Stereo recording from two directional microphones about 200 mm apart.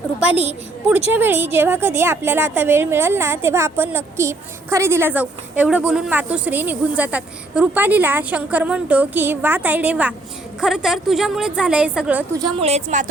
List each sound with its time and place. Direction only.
0.2 s a woman's voice: 5° right (ahead or behind)
12.4 s a woman's voice: 25° right (ahead or behind)